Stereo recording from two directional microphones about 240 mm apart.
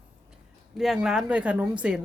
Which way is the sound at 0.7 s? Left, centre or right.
Centre.